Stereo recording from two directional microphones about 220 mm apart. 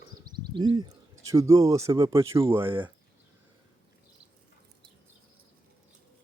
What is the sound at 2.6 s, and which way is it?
Speech, 25° right (ahead or behind).